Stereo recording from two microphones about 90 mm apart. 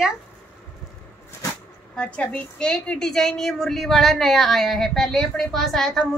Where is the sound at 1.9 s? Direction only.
10° left (ahead or behind).